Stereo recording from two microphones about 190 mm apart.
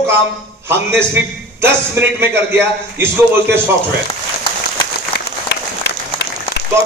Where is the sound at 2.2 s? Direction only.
10° right (ahead or behind).